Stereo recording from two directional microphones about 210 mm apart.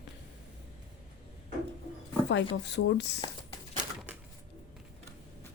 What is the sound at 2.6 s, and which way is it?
Speech, 55° left (ahead or behind).